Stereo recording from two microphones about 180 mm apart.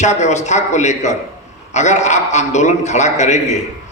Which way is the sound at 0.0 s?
40° left (ahead or behind).